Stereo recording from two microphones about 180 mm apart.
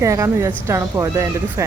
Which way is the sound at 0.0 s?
15° right (ahead or behind).